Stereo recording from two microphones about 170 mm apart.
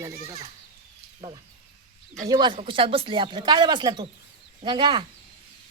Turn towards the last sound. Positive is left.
turn(degrees=-30)  # may be behind; listen again after turning